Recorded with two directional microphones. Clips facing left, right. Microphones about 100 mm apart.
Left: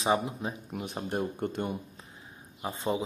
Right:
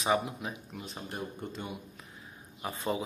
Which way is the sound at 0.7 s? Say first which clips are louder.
Left 7 dB; 55° left (ahead or behind).